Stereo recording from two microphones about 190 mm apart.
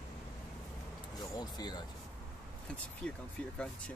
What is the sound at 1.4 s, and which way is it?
Speech, 20° left (ahead or behind).